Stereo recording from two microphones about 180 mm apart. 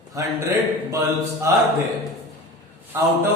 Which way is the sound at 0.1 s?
15° right (ahead or behind).